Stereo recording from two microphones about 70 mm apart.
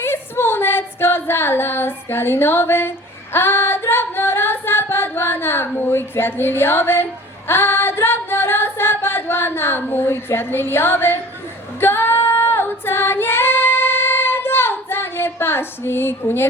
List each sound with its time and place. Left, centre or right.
0.0 s a sound: left
3.3 s singing: left
11.8 s female singing: left